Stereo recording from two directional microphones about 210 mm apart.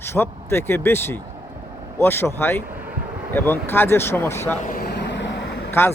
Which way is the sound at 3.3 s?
10° left (ahead or behind).